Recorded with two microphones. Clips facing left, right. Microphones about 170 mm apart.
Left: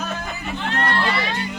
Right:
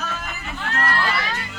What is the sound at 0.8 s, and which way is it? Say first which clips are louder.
Speech: left 1 dB; 30° left (ahead or behind).